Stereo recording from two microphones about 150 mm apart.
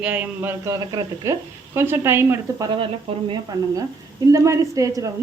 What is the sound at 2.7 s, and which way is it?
Speech, 35° right (ahead or behind).